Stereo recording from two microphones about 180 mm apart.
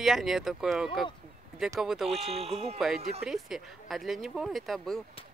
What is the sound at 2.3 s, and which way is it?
Speech, 35° right (ahead or behind).